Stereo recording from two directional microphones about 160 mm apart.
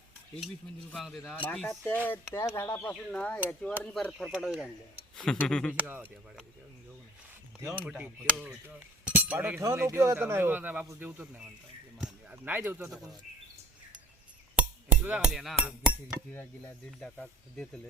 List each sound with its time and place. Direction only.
0.9 s speech: centre (ahead or behind)
1.5 s speech: 10° left (ahead or behind)
5.7 s cutlery: 10° right (ahead or behind)
7.6 s cutlery: 15° right (ahead or behind)
7.9 s cutlery: 5° right (ahead or behind)
12.0 s speech: 10° right (ahead or behind)
14.6 s a sound: 5° right (ahead or behind)
16.3 s speech: 15° left (ahead or behind)